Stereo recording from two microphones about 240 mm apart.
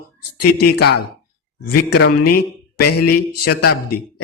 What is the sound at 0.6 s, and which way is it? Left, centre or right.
A man's voice, left.